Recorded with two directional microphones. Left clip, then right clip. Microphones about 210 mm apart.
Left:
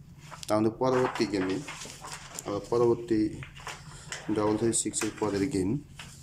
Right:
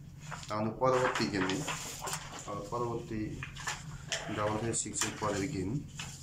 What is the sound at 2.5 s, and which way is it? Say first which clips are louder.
Speech: left 8 dB; 45° left (ahead or behind).